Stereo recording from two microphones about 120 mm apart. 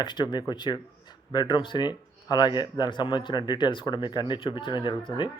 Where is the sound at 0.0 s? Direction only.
40° left (ahead or behind).